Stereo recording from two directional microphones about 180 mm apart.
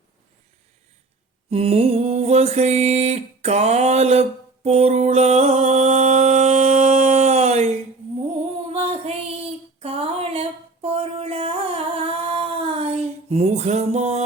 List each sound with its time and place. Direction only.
1.5 s mantra: 35° right (ahead or behind)
8.7 s female singing: 35° right (ahead or behind)
10.8 s a sound: 35° right (ahead or behind)